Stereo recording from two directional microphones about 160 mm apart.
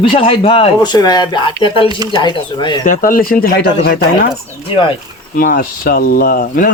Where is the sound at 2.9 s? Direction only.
60° left (ahead or behind).